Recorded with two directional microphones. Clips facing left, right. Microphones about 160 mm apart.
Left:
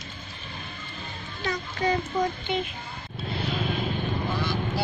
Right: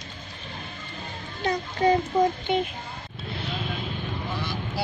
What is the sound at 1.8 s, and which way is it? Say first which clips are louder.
Speech: right 5 dB; 55° right (ahead or behind).